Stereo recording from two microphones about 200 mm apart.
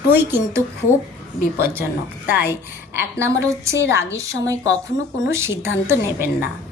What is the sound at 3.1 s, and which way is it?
A woman's voice, 15° right (ahead or behind).